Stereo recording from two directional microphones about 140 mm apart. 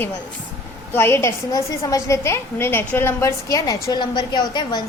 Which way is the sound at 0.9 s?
15° left (ahead or behind).